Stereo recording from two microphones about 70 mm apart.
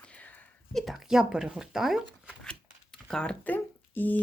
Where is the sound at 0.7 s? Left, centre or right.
Centre.